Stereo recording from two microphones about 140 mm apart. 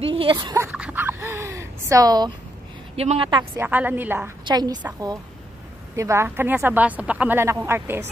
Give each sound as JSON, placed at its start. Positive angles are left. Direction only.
{"t": 0.0, "sound": "speech", "side_deg": -40}
{"t": 0.4, "sound": "a woman's voice", "side_deg": -30}
{"t": 0.7, "sound": "a sound", "side_deg": -10}
{"t": 3.0, "sound": "a woman's voice", "side_deg": -40}
{"t": 3.5, "sound": "a woman's voice", "side_deg": -10}
{"t": 4.5, "sound": "a woman's voice", "side_deg": -30}
{"t": 5.9, "sound": "a woman's voice", "side_deg": -20}